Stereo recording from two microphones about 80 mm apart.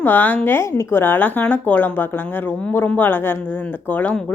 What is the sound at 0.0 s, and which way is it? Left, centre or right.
A woman's voice, left.